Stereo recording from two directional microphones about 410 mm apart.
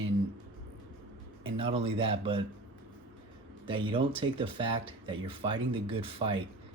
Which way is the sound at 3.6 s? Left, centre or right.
Centre.